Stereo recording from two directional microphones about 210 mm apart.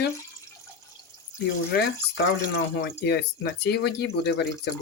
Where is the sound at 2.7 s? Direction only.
50° left (ahead or behind).